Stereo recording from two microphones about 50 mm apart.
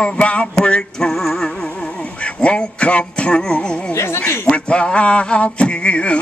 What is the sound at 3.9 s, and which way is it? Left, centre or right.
Speech, left.